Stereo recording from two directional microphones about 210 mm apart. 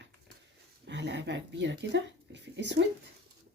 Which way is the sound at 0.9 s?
55° right (ahead or behind).